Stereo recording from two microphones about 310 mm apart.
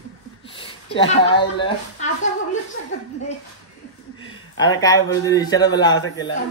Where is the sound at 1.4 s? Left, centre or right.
Centre.